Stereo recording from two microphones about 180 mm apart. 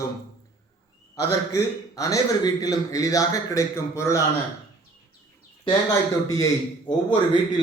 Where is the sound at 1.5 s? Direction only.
15° left (ahead or behind).